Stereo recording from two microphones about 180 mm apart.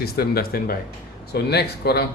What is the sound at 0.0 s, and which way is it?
Speech, 60° left (ahead or behind).